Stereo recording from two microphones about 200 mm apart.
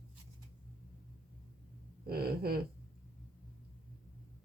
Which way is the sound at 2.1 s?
50° right (ahead or behind).